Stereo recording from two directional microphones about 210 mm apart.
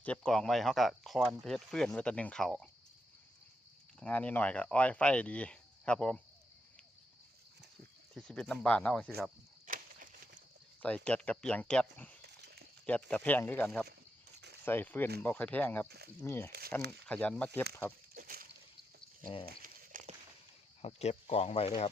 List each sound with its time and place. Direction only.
0.0 s speech: 5° left (ahead or behind)
4.0 s speech: 5° left (ahead or behind)
8.1 s speech: 5° left (ahead or behind)
9.6 s a sound: 40° right (ahead or behind)
10.8 s speech: 5° left (ahead or behind)
12.2 s a sound: 50° right (ahead or behind)
12.8 s speech: 5° left (ahead or behind)
16.5 s speech: 45° right (ahead or behind)
17.1 s speech: 5° left (ahead or behind)
18.1 s a sound: 45° right (ahead or behind)
19.2 s speech: 25° left (ahead or behind)
19.6 s a sound: 40° right (ahead or behind)
20.8 s speech: 30° left (ahead or behind)